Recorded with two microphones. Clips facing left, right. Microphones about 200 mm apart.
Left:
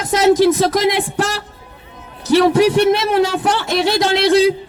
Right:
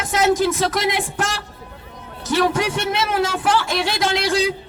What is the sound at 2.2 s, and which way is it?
A man's voice, 35° left (ahead or behind).